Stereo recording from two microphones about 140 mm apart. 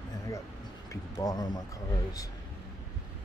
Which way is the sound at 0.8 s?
25° left (ahead or behind).